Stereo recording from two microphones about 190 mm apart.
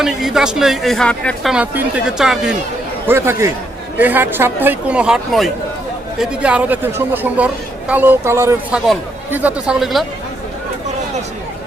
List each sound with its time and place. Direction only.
0.0 s speech: centre (ahead or behind)
3.1 s speech: 15° right (ahead or behind)